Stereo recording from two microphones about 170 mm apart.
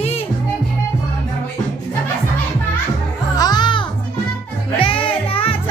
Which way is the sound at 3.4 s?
25° left (ahead or behind).